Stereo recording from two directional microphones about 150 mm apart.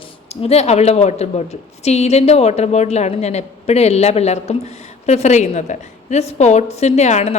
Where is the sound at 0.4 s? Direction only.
45° left (ahead or behind).